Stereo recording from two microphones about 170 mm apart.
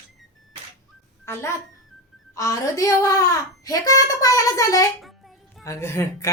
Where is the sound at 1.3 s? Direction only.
15° left (ahead or behind).